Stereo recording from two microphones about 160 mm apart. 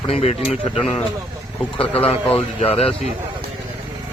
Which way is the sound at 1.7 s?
35° left (ahead or behind).